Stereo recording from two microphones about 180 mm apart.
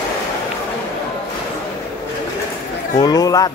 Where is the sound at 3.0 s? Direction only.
20° left (ahead or behind).